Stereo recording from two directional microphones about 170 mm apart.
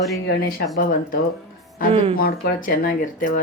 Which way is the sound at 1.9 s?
35° right (ahead or behind).